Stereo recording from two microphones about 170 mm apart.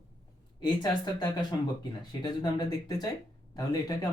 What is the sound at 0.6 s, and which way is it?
Speech, 25° left (ahead or behind).